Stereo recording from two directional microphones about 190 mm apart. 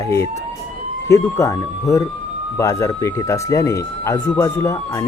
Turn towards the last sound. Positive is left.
turn(degrees=15)  # may be behind; listen again after turning